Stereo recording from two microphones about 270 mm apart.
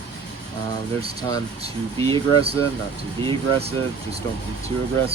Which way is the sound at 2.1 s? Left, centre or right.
Right.